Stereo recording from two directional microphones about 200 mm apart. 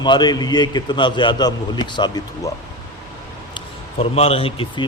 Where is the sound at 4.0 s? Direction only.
30° left (ahead or behind).